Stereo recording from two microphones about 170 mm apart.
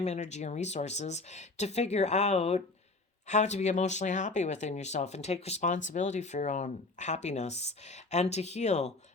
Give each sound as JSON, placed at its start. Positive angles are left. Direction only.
{"t": 0.0, "sound": "speech", "side_deg": 40}